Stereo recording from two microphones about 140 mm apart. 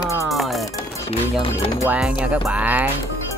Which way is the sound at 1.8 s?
10° right (ahead or behind).